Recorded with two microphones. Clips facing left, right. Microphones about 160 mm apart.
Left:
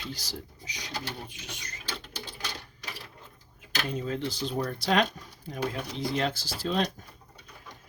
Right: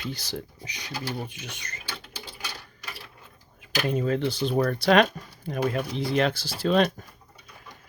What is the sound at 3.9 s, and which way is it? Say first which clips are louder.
Speech: right 7 dB; 65° right (ahead or behind).